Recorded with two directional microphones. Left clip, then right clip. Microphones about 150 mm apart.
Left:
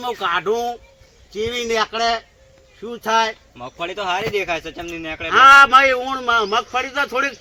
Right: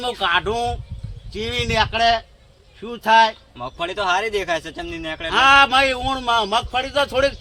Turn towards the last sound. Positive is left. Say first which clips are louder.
# right 2 dB
turn(degrees=-65)  # may be behind; listen again after turning